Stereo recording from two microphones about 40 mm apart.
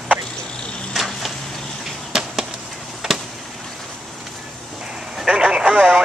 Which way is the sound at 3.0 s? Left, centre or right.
Centre.